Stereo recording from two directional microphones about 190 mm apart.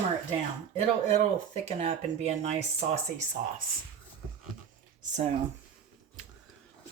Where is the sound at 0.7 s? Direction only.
35° right (ahead or behind).